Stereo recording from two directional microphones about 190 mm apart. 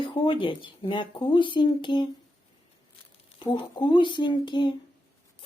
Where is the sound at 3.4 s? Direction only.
25° left (ahead or behind).